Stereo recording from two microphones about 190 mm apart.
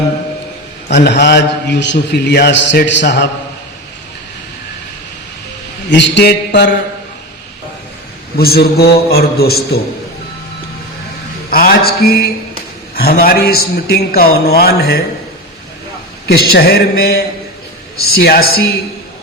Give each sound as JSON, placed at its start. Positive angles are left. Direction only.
{"t": 0.9, "sound": "a man's voice", "side_deg": 65}
{"t": 5.9, "sound": "a man's voice", "side_deg": 65}
{"t": 8.4, "sound": "a man's voice", "side_deg": 55}
{"t": 11.5, "sound": "a man's voice", "side_deg": 50}
{"t": 16.2, "sound": "a man's voice", "side_deg": 55}